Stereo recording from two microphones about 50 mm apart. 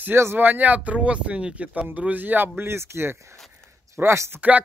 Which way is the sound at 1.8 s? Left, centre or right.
Right.